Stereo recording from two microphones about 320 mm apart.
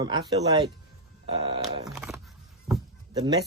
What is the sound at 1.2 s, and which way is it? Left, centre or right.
Speech, centre.